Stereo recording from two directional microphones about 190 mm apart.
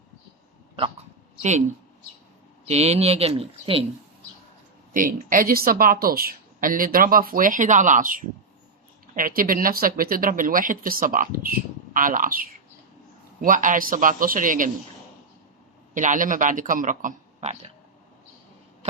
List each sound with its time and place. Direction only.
1.4 s speech: 35° right (ahead or behind)
2.6 s speech: 35° right (ahead or behind)
4.9 s speech: 50° right (ahead or behind)
16.0 s speech: 45° right (ahead or behind)